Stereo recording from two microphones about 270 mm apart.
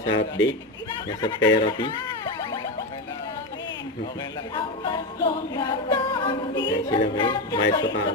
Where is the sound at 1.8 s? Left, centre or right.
Centre.